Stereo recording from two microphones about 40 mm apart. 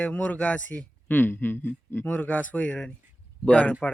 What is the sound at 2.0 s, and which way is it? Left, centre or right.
Speech, left.